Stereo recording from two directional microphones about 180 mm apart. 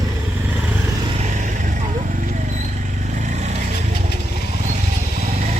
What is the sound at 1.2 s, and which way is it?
Vehicle, 45° right (ahead or behind).